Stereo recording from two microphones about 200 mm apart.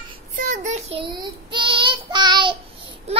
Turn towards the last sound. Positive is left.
turn(degrees=-25)  # may be behind; listen again after turning